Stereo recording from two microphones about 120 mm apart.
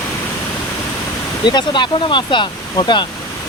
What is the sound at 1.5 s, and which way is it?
Speech, 40° left (ahead or behind).